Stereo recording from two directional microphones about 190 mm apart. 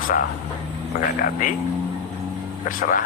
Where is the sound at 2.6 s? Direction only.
45° left (ahead or behind).